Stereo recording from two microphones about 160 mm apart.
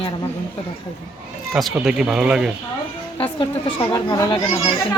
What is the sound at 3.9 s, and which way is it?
Speech, 25° left (ahead or behind).